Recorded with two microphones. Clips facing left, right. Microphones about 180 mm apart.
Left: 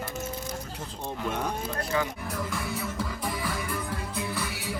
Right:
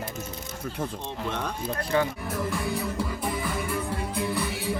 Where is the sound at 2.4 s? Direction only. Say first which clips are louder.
Right 4 dB; 10° right (ahead or behind).